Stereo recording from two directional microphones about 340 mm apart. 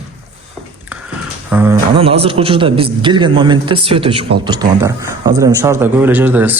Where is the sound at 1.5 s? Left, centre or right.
Centre.